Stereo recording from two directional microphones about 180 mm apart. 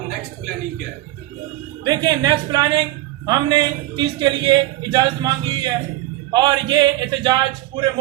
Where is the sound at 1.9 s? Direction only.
25° right (ahead or behind).